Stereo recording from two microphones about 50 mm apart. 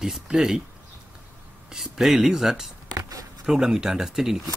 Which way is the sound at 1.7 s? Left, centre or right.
Centre.